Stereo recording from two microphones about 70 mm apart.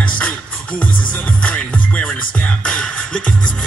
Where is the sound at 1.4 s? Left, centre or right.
Centre.